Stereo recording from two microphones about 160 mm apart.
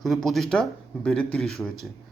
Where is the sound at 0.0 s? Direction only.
Centre (ahead or behind).